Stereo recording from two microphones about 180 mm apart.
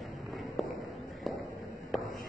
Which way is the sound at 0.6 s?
Centre (ahead or behind).